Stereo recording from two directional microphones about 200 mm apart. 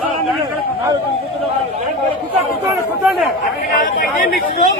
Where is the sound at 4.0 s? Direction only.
45° left (ahead or behind).